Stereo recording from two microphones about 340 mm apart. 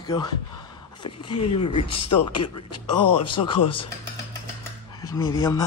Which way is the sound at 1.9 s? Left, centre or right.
Left.